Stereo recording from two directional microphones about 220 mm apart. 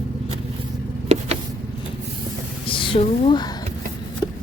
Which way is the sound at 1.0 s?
30° right (ahead or behind).